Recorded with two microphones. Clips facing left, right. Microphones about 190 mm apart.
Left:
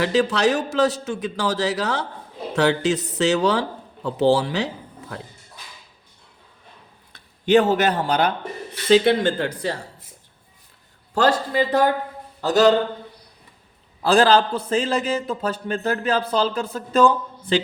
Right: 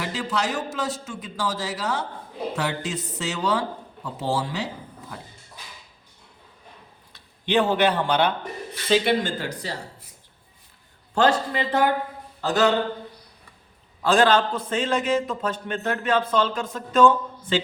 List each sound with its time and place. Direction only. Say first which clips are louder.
0.0 s speech: left 8 dB; 75° left (ahead or behind)
7.1 s speech: left 7 dB; 45° left (ahead or behind)
9.2 s speech: left 7 dB; 55° left (ahead or behind)
11.1 s a man's voice: left 1 dB; 40° left (ahead or behind)
14.0 s a man's voice: left 3 dB; 35° left (ahead or behind)